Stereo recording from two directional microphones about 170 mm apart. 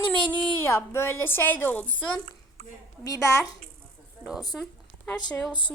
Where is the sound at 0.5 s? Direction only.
15° left (ahead or behind).